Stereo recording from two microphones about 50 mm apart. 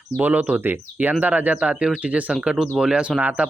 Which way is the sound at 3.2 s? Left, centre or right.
Right.